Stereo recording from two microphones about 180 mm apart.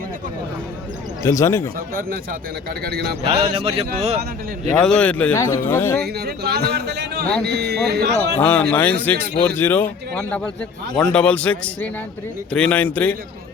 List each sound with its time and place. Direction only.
1.2 s speech: 15° left (ahead or behind)
2.8 s a man's voice: 60° right (ahead or behind)
3.5 s speech: 35° right (ahead or behind)
4.7 s speech: 5° left (ahead or behind)
6.0 s a man's voice: 65° right (ahead or behind)
8.4 s speech: 10° left (ahead or behind)